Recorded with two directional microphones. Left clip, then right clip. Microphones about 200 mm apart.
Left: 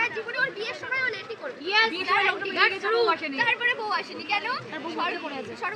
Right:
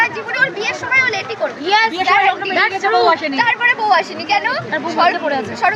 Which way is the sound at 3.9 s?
35° right (ahead or behind).